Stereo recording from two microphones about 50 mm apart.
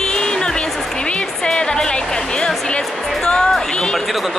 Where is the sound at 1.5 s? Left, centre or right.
Centre.